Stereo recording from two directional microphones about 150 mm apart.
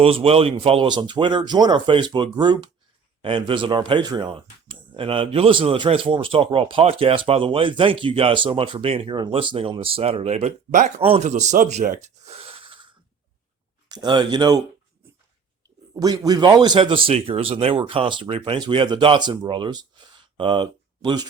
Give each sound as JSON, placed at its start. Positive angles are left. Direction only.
{"t": 0.0, "sound": "speech", "side_deg": -40}
{"t": 16.0, "sound": "speech", "side_deg": -25}